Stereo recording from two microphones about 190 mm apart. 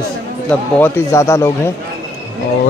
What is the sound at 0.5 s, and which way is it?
Speech, 10° left (ahead or behind).